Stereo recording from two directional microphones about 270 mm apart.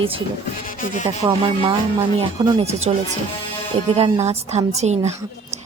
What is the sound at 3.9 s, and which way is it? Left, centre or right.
A woman's voice, right.